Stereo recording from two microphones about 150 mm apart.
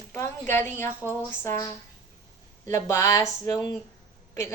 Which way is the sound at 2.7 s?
20° left (ahead or behind).